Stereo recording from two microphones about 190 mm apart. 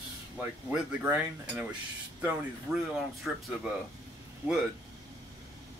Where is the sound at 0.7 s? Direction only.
10° right (ahead or behind).